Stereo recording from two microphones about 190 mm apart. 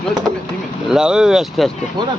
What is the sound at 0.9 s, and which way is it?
Speech, 5° right (ahead or behind).